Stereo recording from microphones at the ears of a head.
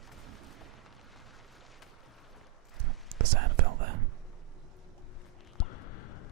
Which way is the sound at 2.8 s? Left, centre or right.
Right.